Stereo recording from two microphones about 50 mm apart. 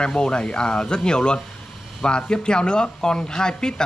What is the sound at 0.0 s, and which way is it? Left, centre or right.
Speech, centre.